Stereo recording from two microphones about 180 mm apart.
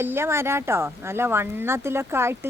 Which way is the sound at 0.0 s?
15° right (ahead or behind).